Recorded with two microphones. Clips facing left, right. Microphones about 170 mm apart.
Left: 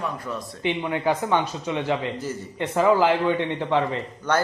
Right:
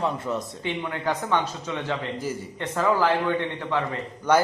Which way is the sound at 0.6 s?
15° left (ahead or behind).